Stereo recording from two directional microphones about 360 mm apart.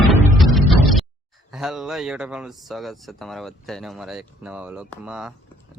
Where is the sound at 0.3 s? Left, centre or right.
Centre.